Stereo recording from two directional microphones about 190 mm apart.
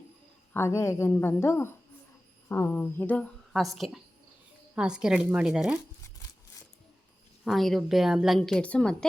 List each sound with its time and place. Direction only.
0.5 s a woman's voice: 15° left (ahead or behind); by 5.8 s 5° right (ahead or behind)
7.4 s a woman's voice: centre (ahead or behind)